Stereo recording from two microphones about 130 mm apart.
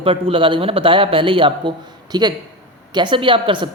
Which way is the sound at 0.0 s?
45° right (ahead or behind).